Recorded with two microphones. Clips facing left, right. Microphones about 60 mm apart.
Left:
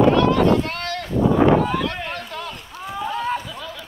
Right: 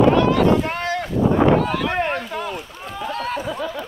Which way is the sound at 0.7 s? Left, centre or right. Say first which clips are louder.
Right 4 dB; centre.